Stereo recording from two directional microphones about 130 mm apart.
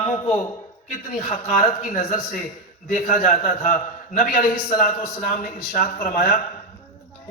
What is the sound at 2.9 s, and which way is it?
A man's voice, 90° left.